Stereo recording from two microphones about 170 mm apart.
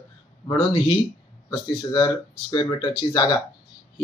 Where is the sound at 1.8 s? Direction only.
25° left (ahead or behind).